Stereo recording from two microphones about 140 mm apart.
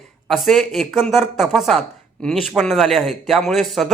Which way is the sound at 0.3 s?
Centre (ahead or behind).